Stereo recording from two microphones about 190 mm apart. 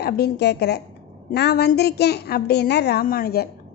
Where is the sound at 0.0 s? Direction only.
60° left (ahead or behind).